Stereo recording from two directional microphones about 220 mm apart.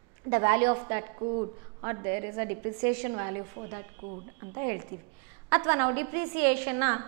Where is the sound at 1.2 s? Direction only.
25° right (ahead or behind).